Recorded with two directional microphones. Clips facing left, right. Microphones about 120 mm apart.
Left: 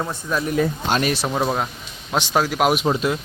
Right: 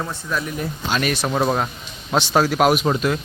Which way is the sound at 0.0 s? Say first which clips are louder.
Left 1 dB; 15° left (ahead or behind).